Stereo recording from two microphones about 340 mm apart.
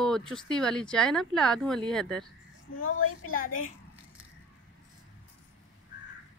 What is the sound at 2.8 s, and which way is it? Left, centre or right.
Speech, left.